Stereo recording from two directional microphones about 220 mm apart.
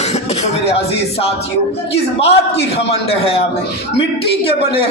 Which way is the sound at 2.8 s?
25° left (ahead or behind).